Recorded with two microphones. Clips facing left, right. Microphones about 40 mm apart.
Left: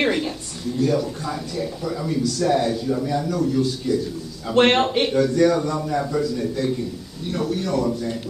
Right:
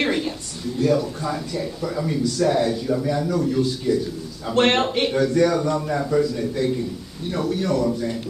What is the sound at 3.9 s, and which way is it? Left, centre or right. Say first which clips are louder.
Speech: right 2 dB; right.